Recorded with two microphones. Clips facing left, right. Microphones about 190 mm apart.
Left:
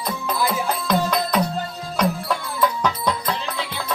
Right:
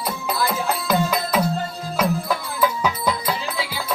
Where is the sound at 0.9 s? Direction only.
5° right (ahead or behind).